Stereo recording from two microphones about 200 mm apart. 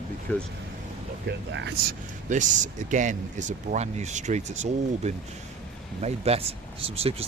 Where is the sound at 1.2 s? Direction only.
65° right (ahead or behind).